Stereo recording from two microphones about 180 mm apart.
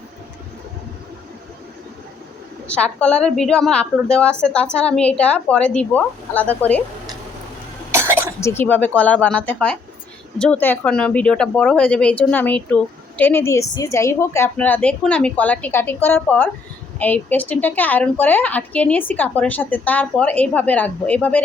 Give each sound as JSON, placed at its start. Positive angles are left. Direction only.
{"t": 2.6, "sound": "a woman's voice", "side_deg": 5}
{"t": 7.9, "sound": "cough", "side_deg": -15}
{"t": 8.4, "sound": "speech", "side_deg": 15}